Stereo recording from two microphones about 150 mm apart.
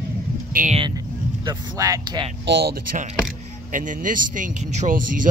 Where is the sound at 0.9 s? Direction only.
25° right (ahead or behind).